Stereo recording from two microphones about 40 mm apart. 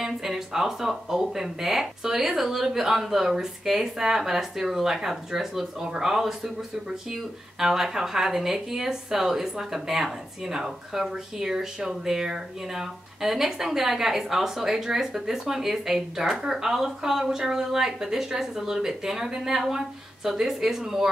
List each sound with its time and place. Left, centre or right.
0.0 s speech: centre
7.5 s speech: centre